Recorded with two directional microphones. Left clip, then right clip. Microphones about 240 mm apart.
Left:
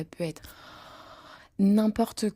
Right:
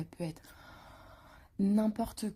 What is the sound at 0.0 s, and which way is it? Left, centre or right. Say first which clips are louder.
Speech: left 8 dB; left.